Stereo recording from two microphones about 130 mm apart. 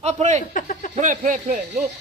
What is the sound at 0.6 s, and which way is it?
Speech, 90° left.